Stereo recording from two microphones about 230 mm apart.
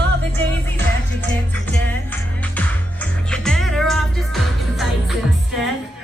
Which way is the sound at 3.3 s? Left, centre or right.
Centre.